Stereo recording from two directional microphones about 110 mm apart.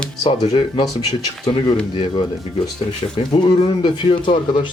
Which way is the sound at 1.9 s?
50° left (ahead or behind).